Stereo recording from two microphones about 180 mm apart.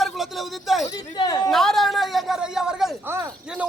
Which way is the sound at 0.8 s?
20° left (ahead or behind).